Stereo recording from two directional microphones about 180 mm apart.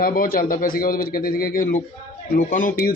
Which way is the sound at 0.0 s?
55° left (ahead or behind).